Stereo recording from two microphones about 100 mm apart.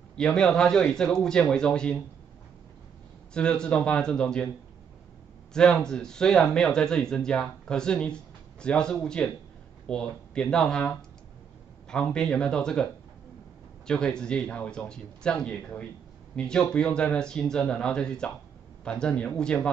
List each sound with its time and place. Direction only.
0.1 s speech: 5° left (ahead or behind)
3.3 s speech: 10° left (ahead or behind)
5.5 s speech: 5° left (ahead or behind)